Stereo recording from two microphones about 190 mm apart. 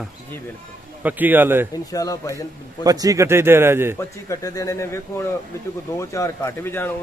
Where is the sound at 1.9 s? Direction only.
20° left (ahead or behind).